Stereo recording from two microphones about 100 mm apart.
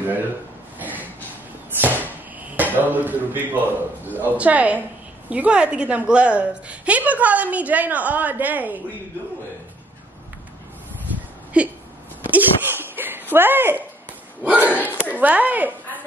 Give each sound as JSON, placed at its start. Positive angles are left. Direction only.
{"t": 0.7, "sound": "a sound", "side_deg": -15}
{"t": 4.2, "sound": "a woman's voice", "side_deg": -15}
{"t": 11.6, "sound": "a woman's voice", "side_deg": -10}
{"t": 12.2, "sound": "a sound", "side_deg": -20}
{"t": 14.4, "sound": "a woman's voice", "side_deg": -15}
{"t": 14.7, "sound": "speech", "side_deg": 15}
{"t": 15.1, "sound": "a woman's voice", "side_deg": -15}